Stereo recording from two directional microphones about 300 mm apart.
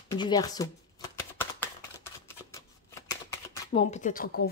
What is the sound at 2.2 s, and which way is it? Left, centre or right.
Shuffling cards, centre.